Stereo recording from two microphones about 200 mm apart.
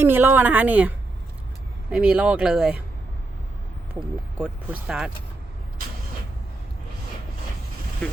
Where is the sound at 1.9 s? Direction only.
5° right (ahead or behind).